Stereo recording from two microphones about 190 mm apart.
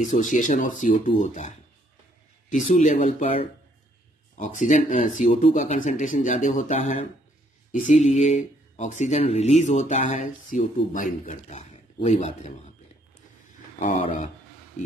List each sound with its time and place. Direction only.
0.0 s speech: 40° left (ahead or behind)
2.5 s speech: 40° left (ahead or behind)
13.7 s speech: 40° left (ahead or behind)